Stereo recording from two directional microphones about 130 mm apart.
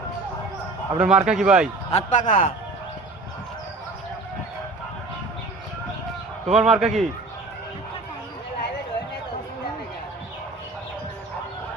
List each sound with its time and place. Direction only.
0.9 s speech: 5° right (ahead or behind)
1.9 s a man's voice: 65° left (ahead or behind)
6.5 s a man's voice: 5° right (ahead or behind)